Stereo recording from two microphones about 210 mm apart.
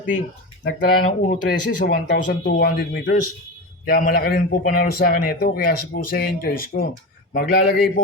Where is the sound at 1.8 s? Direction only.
50° left (ahead or behind).